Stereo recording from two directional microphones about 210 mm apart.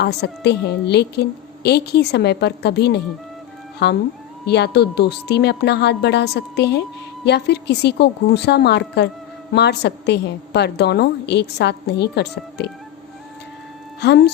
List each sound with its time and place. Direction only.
0.0 s a woman's voice: 50° left (ahead or behind)
14.0 s a woman's voice: 55° left (ahead or behind)